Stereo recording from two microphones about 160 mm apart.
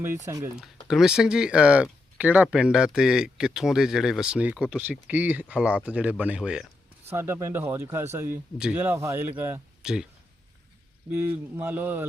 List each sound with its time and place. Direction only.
0.9 s speech: 5° right (ahead or behind)
7.1 s speech: 15° right (ahead or behind)
11.3 s speech: 15° right (ahead or behind)